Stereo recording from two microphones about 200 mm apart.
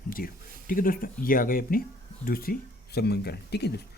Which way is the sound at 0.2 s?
45° left (ahead or behind).